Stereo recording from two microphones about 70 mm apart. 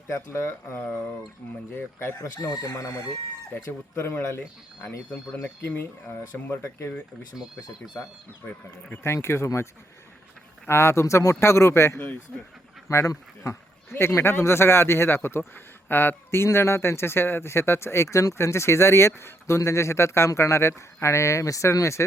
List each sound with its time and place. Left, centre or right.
0.1 s a man's voice: left
2.2 s speech: left
3.7 s a man's voice: left
6.6 s speech: left
7.3 s speech: centre
9.0 s a man's voice: left
10.7 s a man's voice: left